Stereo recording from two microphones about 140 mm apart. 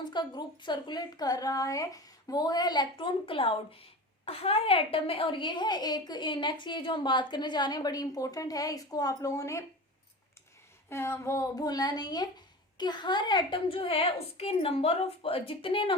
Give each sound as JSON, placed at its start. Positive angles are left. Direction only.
{"t": 0.0, "sound": "a woman's voice", "side_deg": 30}
{"t": 10.8, "sound": "a woman's voice", "side_deg": 20}